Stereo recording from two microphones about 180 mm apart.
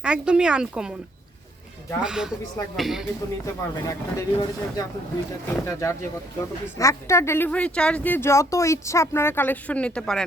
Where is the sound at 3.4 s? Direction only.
15° left (ahead or behind).